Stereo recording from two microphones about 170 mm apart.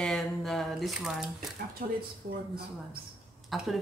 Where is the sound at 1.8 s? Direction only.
55° right (ahead or behind).